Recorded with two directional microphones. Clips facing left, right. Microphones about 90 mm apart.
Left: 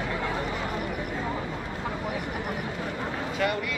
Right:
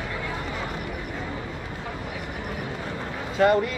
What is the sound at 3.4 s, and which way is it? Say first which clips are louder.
Speech: right 9 dB; 35° right (ahead or behind).